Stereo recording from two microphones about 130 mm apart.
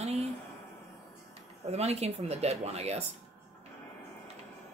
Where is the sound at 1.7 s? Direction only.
55° right (ahead or behind).